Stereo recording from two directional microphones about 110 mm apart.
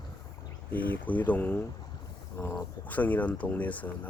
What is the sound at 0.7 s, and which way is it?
Speech, 15° left (ahead or behind).